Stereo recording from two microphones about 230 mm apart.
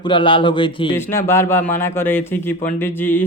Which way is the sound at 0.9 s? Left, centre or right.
Centre.